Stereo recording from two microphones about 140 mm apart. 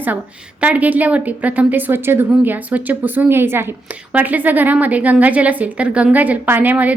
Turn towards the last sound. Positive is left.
turn(degrees=-10)  # may be behind; listen again after turning